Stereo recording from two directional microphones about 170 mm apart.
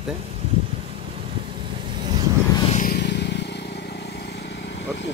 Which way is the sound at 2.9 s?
85° left.